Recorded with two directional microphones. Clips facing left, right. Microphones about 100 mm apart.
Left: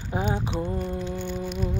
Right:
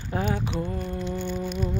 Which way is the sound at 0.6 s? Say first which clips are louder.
Left 1 dB; 5° left (ahead or behind).